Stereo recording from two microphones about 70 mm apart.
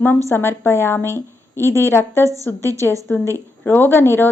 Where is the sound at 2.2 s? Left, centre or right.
Right.